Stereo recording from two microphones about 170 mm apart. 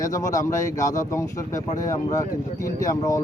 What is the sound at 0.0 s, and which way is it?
A man's voice, 20° left (ahead or behind).